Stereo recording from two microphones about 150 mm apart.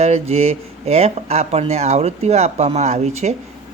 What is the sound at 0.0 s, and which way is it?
Speech, 45° right (ahead or behind).